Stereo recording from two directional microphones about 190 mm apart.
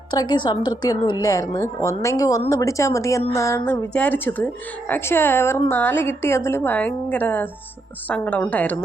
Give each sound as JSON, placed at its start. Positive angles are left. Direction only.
{"t": 0.1, "sound": "a woman's voice", "side_deg": 20}